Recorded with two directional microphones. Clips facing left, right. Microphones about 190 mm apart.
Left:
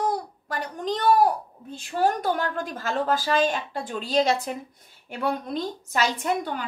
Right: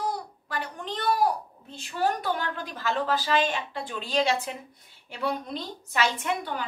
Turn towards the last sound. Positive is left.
turn(degrees=40)  # may be behind; listen again after turning